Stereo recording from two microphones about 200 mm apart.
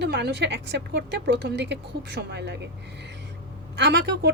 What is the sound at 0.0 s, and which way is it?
A woman's voice, 55° right (ahead or behind).